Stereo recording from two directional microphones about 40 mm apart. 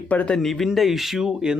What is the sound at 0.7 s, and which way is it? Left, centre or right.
Speech, centre.